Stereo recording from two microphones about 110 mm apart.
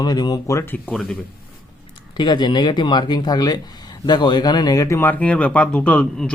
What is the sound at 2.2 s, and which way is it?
Speech, 40° left (ahead or behind).